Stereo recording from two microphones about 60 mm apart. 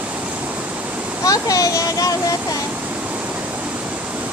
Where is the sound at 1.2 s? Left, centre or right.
Left.